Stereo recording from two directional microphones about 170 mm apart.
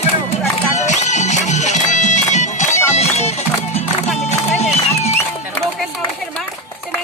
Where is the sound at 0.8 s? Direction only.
45° left (ahead or behind).